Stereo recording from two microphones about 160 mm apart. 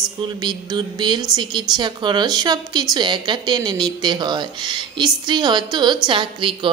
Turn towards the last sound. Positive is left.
turn(degrees=-30)  # may be behind; listen again after turning